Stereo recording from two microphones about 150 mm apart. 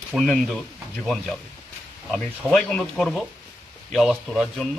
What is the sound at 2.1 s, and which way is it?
Speech, centre (ahead or behind).